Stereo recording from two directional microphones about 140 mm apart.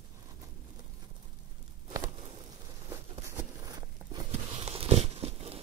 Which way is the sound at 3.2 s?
30° right (ahead or behind).